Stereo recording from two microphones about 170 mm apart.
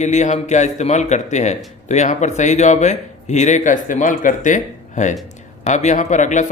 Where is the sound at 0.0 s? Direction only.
45° left (ahead or behind).